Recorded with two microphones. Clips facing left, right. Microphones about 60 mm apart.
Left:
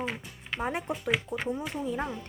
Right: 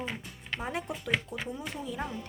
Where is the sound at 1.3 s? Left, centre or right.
Left.